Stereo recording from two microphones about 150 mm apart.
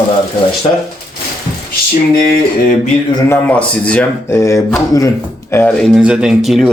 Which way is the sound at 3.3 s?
10° left (ahead or behind).